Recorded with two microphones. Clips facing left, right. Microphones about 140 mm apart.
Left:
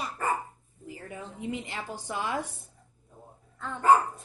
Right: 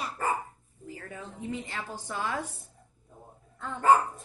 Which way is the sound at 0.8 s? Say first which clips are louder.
Left 1 dB; 15° left (ahead or behind).